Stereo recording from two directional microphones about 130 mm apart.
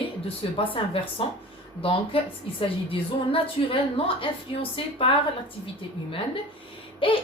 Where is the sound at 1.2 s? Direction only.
45° left (ahead or behind).